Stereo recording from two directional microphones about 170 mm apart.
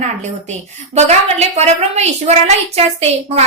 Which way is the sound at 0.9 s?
40° right (ahead or behind).